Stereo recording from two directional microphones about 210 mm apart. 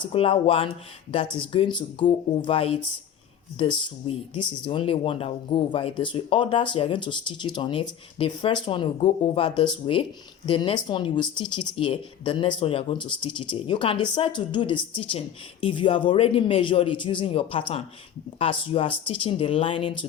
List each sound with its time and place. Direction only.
0.0 s speech: 25° left (ahead or behind)